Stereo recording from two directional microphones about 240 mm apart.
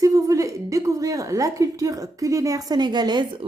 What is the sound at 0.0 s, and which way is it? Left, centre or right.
A woman's voice, centre.